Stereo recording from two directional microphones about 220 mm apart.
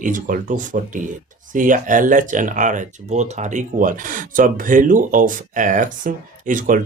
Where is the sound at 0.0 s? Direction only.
35° right (ahead or behind).